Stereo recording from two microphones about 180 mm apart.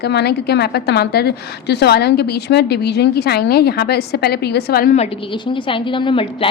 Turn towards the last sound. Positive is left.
turn(degrees=30)  # may be behind; listen again after turning